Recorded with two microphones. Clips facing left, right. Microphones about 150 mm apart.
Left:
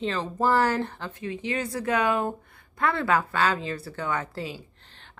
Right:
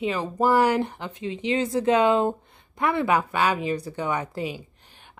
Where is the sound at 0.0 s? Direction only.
10° right (ahead or behind).